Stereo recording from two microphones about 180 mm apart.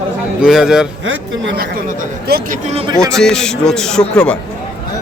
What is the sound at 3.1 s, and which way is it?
Speech, 5° left (ahead or behind).